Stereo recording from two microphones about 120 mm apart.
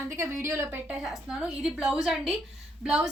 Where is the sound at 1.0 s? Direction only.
5° right (ahead or behind).